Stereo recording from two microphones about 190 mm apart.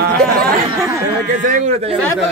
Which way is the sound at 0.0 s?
50° right (ahead or behind).